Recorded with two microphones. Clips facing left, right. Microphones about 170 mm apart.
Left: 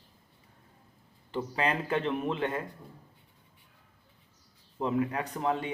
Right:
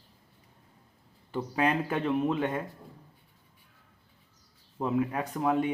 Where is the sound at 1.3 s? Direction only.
5° right (ahead or behind).